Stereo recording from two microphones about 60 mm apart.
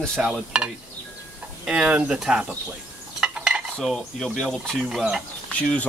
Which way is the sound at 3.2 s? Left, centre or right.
Centre.